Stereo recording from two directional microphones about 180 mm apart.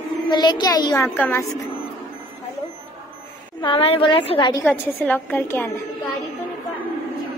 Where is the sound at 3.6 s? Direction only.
30° left (ahead or behind).